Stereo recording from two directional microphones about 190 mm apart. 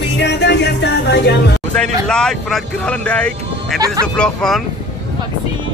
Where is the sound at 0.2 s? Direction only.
65° left (ahead or behind).